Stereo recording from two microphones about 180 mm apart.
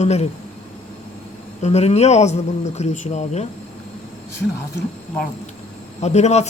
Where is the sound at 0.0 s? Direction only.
35° left (ahead or behind).